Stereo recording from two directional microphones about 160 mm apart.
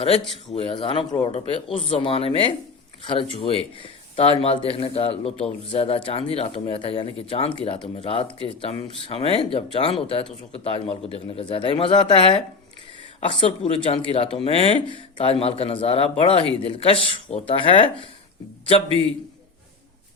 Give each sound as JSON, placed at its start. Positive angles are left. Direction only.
{"t": 0.0, "sound": "speech", "side_deg": 35}